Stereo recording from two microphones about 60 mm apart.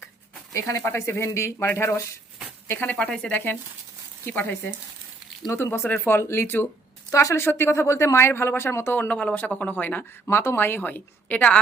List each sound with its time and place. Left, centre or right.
0.8 s speech: left
1.5 s speech: left
2.9 s speech: centre
3.3 s a woman's voice: left
5.5 s a woman's voice: left
7.1 s a woman's voice: left
7.3 s speech: left
9.0 s speech: left
10.2 s a woman's voice: left